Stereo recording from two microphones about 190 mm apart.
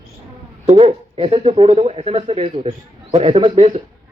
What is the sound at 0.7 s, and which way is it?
Speech, 30° right (ahead or behind).